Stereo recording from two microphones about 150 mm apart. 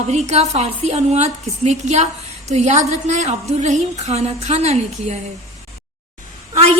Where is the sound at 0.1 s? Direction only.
50° right (ahead or behind).